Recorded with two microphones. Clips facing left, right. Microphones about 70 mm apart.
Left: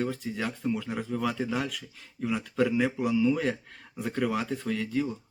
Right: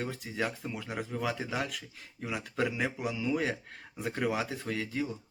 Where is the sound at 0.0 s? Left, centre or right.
Centre.